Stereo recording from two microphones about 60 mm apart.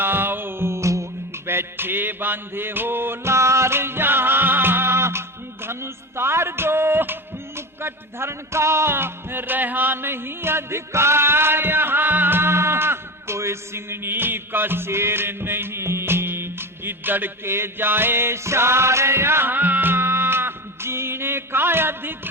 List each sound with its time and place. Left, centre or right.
0.0 s music: right
1.5 s music: right